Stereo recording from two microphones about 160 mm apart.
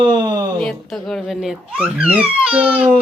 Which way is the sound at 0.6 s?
5° left (ahead or behind).